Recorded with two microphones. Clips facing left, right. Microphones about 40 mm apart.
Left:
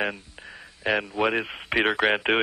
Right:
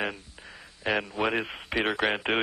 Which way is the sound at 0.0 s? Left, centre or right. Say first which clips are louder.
Left 4 dB; centre.